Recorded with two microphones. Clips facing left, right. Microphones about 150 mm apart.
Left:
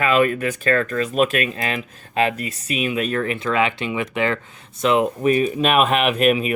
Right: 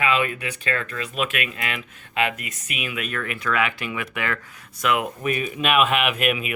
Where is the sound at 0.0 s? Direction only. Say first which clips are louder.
Left 6 dB; 45° left (ahead or behind).